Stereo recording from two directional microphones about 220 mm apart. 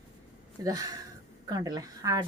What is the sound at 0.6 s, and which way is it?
A woman's voice, 15° right (ahead or behind).